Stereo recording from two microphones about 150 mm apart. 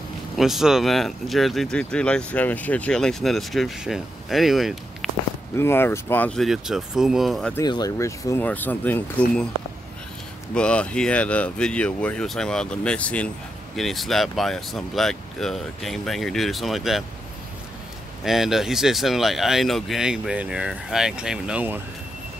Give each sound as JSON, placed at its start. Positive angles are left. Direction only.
{"t": 0.4, "sound": "speech", "side_deg": 0}
{"t": 5.6, "sound": "speech", "side_deg": 15}
{"t": 6.4, "sound": "speech", "side_deg": -5}
{"t": 7.6, "sound": "speech", "side_deg": 25}
{"t": 10.5, "sound": "speech", "side_deg": 5}
{"t": 18.2, "sound": "speech", "side_deg": 0}